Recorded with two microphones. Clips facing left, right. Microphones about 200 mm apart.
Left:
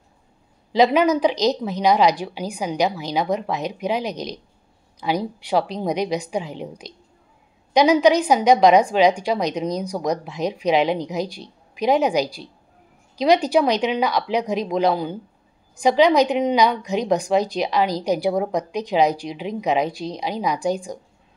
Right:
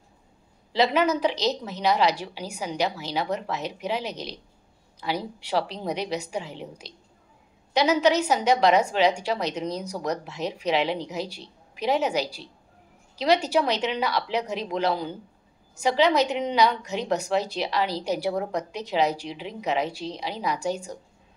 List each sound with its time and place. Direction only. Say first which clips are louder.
0.9 s a woman's voice: left 5 dB; 15° left (ahead or behind)